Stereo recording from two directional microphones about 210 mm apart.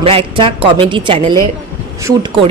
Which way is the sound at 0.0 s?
25° right (ahead or behind).